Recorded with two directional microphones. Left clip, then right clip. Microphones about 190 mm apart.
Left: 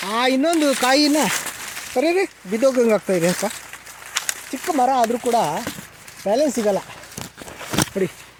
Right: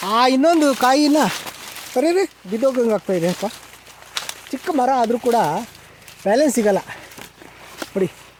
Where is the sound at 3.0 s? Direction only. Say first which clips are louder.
Left 1 dB; 5° right (ahead or behind).